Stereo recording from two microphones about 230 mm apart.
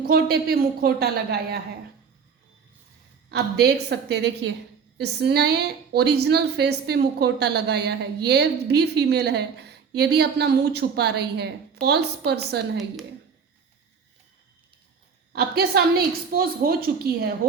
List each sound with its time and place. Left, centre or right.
0.0 s a woman's voice: right
3.2 s a woman's voice: right
15.3 s a woman's voice: right